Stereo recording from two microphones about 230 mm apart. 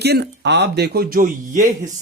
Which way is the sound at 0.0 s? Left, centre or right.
Right.